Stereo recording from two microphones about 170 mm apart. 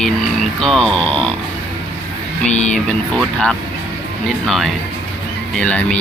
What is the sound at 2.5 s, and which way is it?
Speech, 40° left (ahead or behind).